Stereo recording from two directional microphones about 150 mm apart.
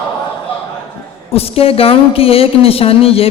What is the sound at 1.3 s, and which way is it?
A woman's voice, 40° left (ahead or behind).